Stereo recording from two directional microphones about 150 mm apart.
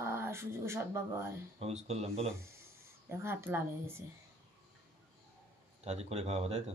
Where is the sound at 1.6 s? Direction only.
45° right (ahead or behind).